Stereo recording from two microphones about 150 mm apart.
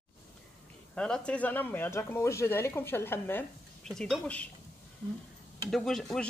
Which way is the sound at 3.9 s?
5° left (ahead or behind).